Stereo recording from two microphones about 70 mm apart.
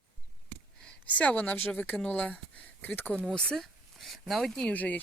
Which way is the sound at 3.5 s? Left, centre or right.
Centre.